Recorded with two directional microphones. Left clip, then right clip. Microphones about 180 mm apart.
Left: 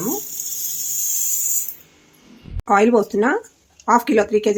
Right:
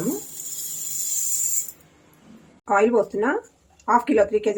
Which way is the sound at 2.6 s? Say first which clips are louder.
Left 4 dB; 50° left (ahead or behind).